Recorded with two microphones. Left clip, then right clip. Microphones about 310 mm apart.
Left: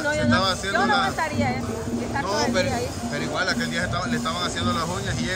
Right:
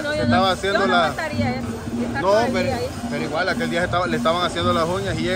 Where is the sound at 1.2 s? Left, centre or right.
Left.